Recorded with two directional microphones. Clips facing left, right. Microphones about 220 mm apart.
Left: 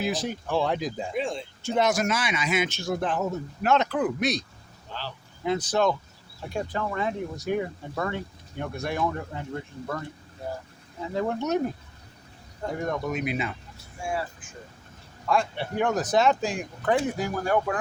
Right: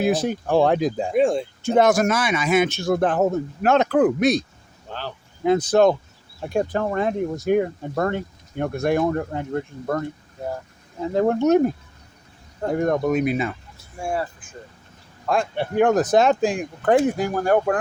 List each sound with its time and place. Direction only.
0.0 s speech: 55° right (ahead or behind)
11.1 s speech: 50° right (ahead or behind)
12.7 s speech: 50° right (ahead or behind)
15.3 s speech: 50° right (ahead or behind)